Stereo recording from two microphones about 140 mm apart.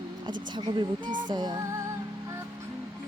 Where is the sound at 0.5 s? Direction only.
30° right (ahead or behind).